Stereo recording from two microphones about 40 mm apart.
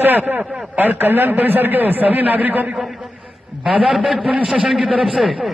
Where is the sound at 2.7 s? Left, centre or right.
Centre.